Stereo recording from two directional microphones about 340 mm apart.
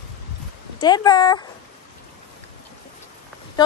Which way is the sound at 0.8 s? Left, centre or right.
Centre.